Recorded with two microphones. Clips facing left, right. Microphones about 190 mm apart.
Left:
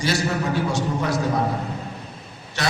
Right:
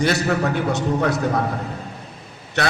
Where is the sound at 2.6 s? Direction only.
60° right (ahead or behind).